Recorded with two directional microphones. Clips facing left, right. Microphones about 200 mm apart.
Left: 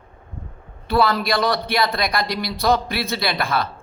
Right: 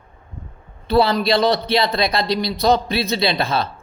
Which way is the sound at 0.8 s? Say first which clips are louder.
Right 3 dB; 20° right (ahead or behind).